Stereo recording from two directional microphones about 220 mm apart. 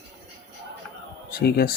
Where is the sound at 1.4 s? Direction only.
45° left (ahead or behind).